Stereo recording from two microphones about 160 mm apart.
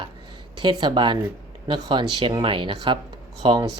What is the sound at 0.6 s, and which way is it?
Speech, 30° right (ahead or behind).